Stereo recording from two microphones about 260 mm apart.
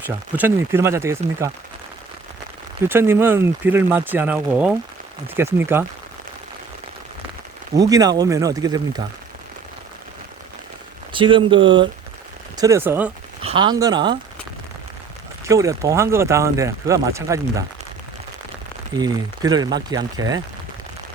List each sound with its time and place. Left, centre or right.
0.3 s speech: centre
2.9 s speech: centre
7.8 s speech: centre
11.1 s speech: centre
13.4 s speech: centre
15.4 s speech: centre
18.9 s speech: centre